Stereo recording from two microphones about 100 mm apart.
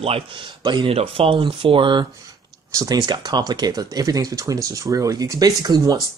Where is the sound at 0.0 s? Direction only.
75° right (ahead or behind); by 2.0 s 55° right (ahead or behind).